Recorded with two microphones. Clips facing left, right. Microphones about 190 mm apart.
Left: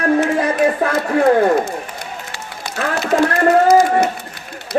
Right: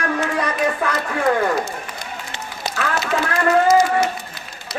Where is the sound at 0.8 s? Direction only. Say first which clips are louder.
Left 6 dB; 35° left (ahead or behind).